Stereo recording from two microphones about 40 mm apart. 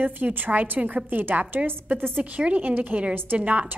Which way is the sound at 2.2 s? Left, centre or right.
Right.